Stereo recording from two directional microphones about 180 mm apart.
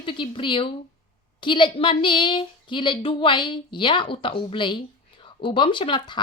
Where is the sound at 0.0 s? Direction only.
30° left (ahead or behind).